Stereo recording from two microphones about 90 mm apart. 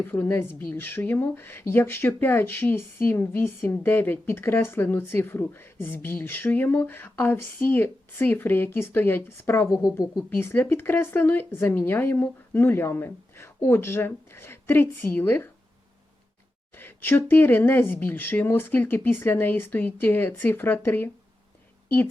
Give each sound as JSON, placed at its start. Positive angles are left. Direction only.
{"t": 0.0, "sound": "a woman's voice", "side_deg": 20}
{"t": 16.7, "sound": "a woman's voice", "side_deg": 25}